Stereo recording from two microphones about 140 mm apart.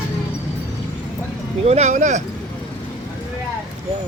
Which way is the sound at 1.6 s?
50° right (ahead or behind).